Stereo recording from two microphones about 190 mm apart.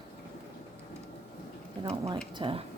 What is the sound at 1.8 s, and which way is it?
Speech, 30° right (ahead or behind).